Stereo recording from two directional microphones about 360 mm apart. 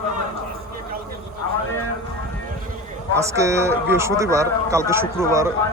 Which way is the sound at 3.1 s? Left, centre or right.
Centre.